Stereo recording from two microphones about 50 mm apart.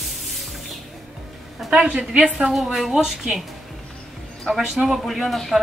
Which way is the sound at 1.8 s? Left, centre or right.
Right.